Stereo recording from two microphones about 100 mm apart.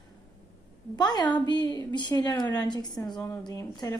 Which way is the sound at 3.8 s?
30° left (ahead or behind).